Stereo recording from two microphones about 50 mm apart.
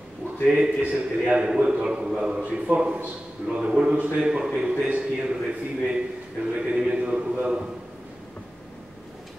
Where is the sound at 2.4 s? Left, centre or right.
Right.